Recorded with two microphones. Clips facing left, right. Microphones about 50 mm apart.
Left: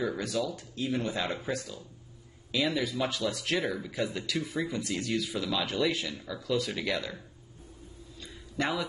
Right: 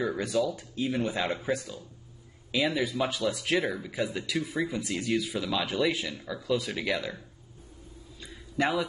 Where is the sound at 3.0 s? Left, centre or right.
Centre.